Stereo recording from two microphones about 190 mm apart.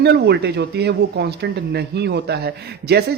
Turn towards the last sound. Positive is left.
turn(degrees=-60)  # may be behind; listen again after turning